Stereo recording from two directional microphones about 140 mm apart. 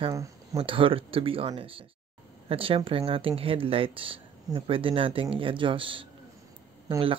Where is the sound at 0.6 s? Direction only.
40° right (ahead or behind).